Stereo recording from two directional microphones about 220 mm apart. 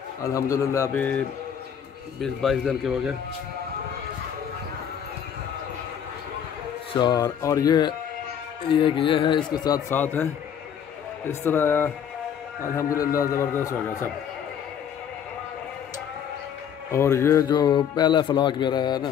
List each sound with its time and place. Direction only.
0.2 s a man's voice: 15° left (ahead or behind)
2.2 s a man's voice: centre (ahead or behind)
6.9 s a man's voice: 20° left (ahead or behind)
11.2 s a man's voice: 10° left (ahead or behind)
16.9 s speech: 10° left (ahead or behind)